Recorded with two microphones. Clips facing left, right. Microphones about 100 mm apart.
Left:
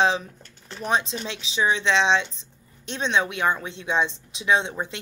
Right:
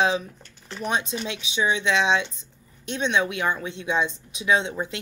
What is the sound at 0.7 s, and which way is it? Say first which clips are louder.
Speech: left 2 dB; 35° left (ahead or behind).